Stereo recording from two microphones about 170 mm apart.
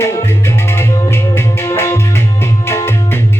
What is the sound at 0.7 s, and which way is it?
Music, 15° left (ahead or behind).